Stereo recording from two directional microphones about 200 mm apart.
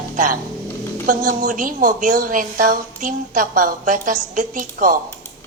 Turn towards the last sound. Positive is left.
turn(degrees=-40)  # may be behind; listen again after turning